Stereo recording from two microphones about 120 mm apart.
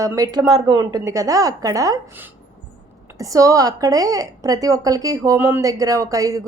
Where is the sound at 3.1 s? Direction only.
30° right (ahead or behind).